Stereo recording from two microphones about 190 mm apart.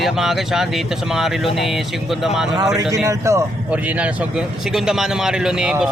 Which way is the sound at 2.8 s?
15° right (ahead or behind).